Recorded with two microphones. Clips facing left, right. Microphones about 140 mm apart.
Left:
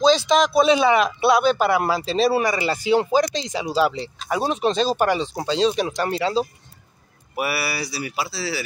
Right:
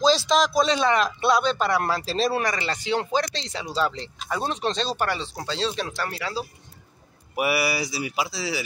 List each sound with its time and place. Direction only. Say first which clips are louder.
0.0 s speech: left 3 dB; centre (ahead or behind); by 6.4 s 25° left (ahead or behind)
7.3 s speech: right 2 dB; 15° right (ahead or behind)